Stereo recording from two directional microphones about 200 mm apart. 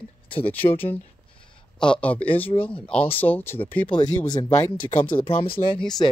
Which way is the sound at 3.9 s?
20° left (ahead or behind).